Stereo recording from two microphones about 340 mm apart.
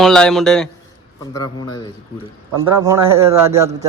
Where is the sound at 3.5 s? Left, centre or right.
Centre.